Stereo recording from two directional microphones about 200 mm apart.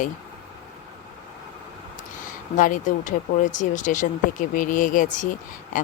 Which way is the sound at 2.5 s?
40° left (ahead or behind).